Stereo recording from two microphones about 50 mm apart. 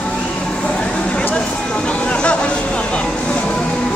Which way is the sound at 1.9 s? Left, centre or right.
Left.